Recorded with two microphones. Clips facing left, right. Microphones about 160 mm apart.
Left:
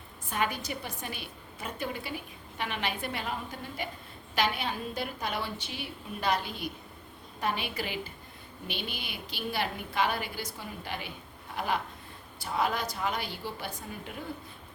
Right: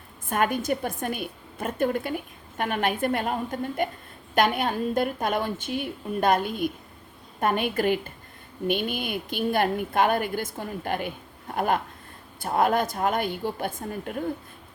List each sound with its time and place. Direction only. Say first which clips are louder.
0.3 s a woman's voice: right 8 dB; 50° right (ahead or behind)